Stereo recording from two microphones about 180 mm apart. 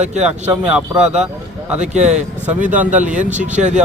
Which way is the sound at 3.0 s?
45° right (ahead or behind).